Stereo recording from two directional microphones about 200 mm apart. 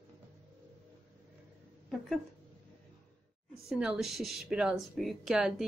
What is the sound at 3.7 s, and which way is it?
Speech, 5° right (ahead or behind).